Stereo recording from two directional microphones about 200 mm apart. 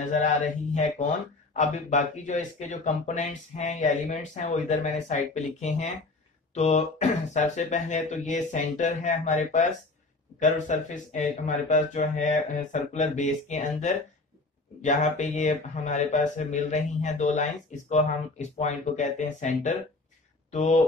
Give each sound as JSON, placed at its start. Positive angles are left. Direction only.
{"t": 0.0, "sound": "speech", "side_deg": 40}
{"t": 1.5, "sound": "speech", "side_deg": 40}